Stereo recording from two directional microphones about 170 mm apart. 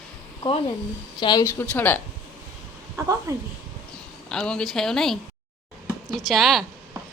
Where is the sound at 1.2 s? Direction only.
25° left (ahead or behind).